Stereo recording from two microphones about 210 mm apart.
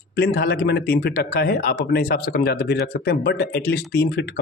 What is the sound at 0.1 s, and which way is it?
A man's voice, 50° left (ahead or behind).